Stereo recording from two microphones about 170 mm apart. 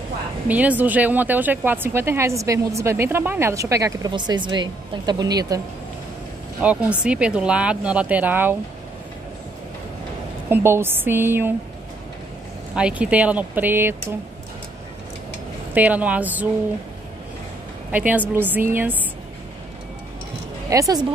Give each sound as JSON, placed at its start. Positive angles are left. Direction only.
{"t": 0.5, "sound": "speech", "side_deg": -10}
{"t": 6.6, "sound": "speech", "side_deg": -5}
{"t": 10.5, "sound": "speech", "side_deg": -15}
{"t": 12.7, "sound": "speech", "side_deg": -5}
{"t": 15.7, "sound": "speech", "side_deg": -10}
{"t": 17.9, "sound": "speech", "side_deg": -10}
{"t": 20.7, "sound": "speech", "side_deg": -20}